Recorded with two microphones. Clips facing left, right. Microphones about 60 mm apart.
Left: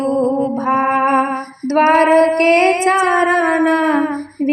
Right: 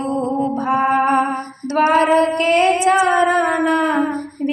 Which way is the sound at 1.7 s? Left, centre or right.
Left.